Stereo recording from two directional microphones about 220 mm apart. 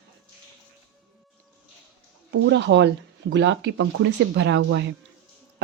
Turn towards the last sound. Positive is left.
turn(degrees=-55)  # may be behind; listen again after turning